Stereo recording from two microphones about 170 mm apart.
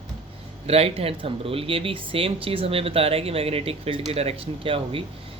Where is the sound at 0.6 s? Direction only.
35° right (ahead or behind).